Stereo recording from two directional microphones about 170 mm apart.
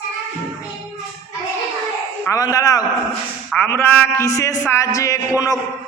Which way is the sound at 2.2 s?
20° left (ahead or behind).